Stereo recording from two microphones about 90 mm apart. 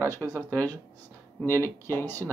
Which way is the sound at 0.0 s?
25° left (ahead or behind).